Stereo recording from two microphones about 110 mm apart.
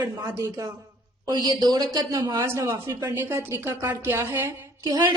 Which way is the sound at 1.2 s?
40° right (ahead or behind).